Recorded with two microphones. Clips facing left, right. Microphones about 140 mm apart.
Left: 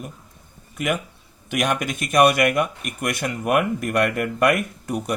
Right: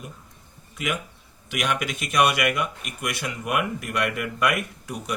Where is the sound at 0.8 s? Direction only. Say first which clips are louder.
Left 5 dB; 50° left (ahead or behind).